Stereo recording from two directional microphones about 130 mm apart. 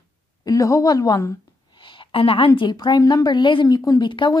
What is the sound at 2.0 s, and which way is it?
Speech, 45° left (ahead or behind).